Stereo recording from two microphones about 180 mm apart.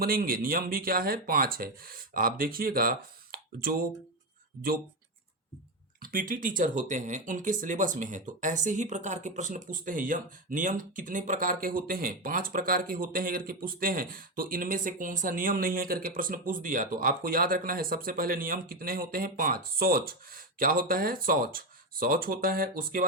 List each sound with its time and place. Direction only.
0.0 s speech: 55° right (ahead or behind)
6.0 s speech: 50° right (ahead or behind)